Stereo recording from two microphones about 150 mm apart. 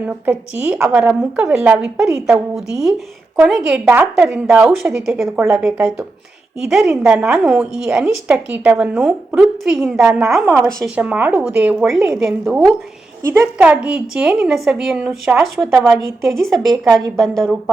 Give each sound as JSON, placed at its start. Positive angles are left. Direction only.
{"t": 0.0, "sound": "a woman's voice", "side_deg": -10}
{"t": 13.2, "sound": "a woman's voice", "side_deg": -20}
{"t": 13.7, "sound": "a woman's voice", "side_deg": -5}